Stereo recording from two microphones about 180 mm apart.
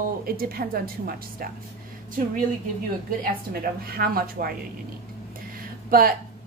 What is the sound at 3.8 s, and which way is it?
Speech, 55° right (ahead or behind).